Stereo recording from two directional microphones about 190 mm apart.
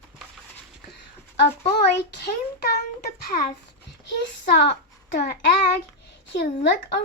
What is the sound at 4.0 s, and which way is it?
A child's voice, 65° left (ahead or behind).